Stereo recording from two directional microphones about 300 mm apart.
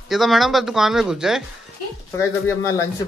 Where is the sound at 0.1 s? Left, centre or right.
Centre.